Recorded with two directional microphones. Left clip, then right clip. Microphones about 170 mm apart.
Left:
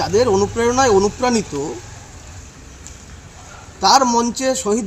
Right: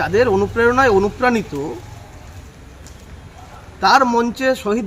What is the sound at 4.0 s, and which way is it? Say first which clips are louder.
Speech: right 1 dB; 25° right (ahead or behind).